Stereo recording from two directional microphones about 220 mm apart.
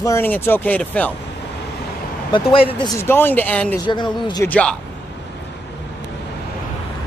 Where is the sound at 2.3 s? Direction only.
25° left (ahead or behind).